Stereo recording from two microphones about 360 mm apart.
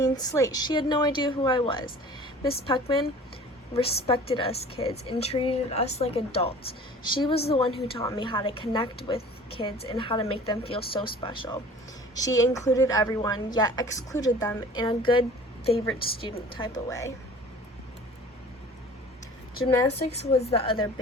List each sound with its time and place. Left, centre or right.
0.0 s a woman's voice: centre
20.0 s speech: centre